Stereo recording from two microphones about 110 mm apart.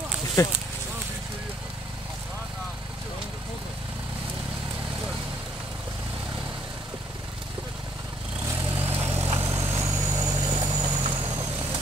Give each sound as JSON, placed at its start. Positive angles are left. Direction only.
{"t": 0.4, "sound": "speech", "side_deg": 30}
{"t": 8.7, "sound": "vehicle", "side_deg": -20}
{"t": 9.3, "sound": "vehicle", "side_deg": -60}
{"t": 9.6, "sound": "vehicle", "side_deg": -25}
{"t": 11.1, "sound": "vehicle", "side_deg": -60}